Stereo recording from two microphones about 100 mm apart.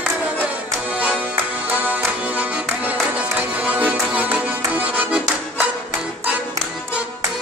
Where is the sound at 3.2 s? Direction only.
15° right (ahead or behind).